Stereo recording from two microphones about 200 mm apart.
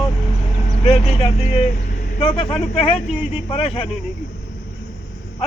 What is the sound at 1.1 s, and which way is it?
A man's voice, 30° left (ahead or behind).